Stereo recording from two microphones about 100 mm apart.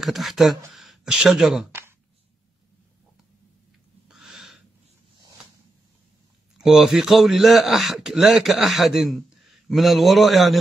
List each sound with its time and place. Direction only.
0.0 s a man's voice: centre (ahead or behind)
1.7 s a sound: 25° right (ahead or behind)
4.1 s owl: 5° right (ahead or behind)
6.6 s a man's voice: 5° right (ahead or behind)